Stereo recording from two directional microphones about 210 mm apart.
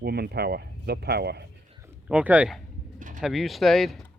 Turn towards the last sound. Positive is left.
turn(degrees=0)  # may be behind; listen again after turning